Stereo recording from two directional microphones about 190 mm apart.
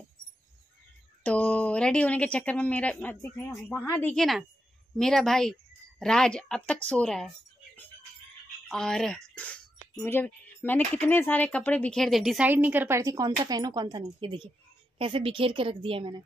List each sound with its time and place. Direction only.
1.2 s a woman's voice: 5° left (ahead or behind); by 16.2 s 30° right (ahead or behind)